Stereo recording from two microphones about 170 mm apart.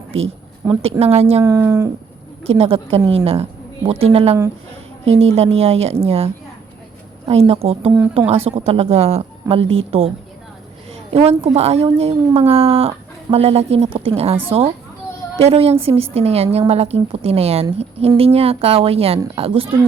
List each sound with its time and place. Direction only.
0.8 s a woman's voice: 40° right (ahead or behind)
1.4 s speech: 15° right (ahead or behind)
2.4 s a woman's voice: 35° right (ahead or behind)
11.1 s a woman's voice: 35° right (ahead or behind)